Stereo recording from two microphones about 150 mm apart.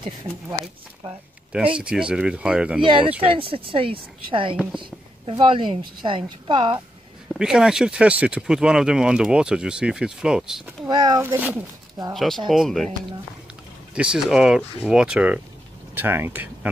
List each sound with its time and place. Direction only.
1.8 s speech: 5° right (ahead or behind)
2.8 s a woman's voice: 35° right (ahead or behind)
7.3 s speech: 5° right (ahead or behind)
10.9 s a child's voice: 25° right (ahead or behind)
11.2 s speech: 10° right (ahead or behind)
12.1 s speech: centre (ahead or behind)
13.9 s speech: 5° right (ahead or behind)